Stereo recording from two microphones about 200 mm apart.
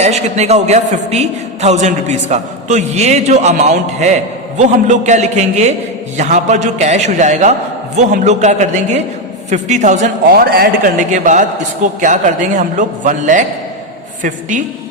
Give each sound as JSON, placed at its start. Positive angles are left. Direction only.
{"t": 0.0, "sound": "a man's voice", "side_deg": -35}